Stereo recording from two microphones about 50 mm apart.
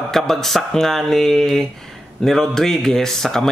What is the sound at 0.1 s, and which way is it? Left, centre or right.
Speech, centre.